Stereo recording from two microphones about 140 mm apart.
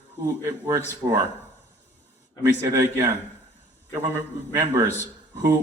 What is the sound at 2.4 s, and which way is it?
Speech, 20° right (ahead or behind).